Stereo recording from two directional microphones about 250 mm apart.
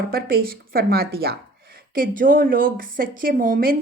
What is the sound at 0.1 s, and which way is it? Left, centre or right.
A woman's voice, right.